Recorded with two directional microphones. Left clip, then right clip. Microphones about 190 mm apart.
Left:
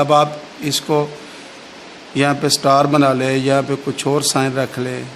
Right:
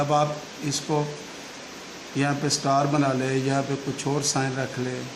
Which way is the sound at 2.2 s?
50° left (ahead or behind).